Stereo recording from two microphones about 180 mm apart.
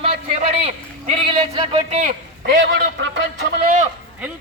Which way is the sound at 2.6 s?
80° right.